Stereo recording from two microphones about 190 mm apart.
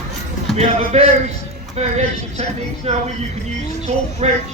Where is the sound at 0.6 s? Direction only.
35° right (ahead or behind).